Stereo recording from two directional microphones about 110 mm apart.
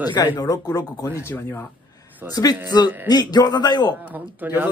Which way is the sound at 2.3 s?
35° left (ahead or behind).